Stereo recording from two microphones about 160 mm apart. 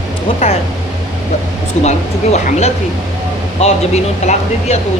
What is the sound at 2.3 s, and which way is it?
Speech, 45° left (ahead or behind).